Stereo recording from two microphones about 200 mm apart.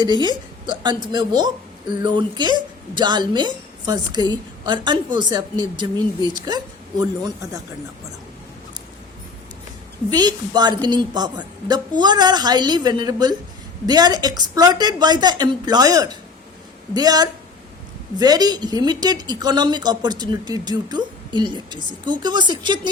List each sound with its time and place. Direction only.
0.0 s a woman's voice: 20° right (ahead or behind)
10.1 s a woman's voice: 20° right (ahead or behind)